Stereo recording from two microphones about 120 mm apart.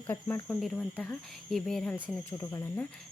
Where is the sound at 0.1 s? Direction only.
20° left (ahead or behind).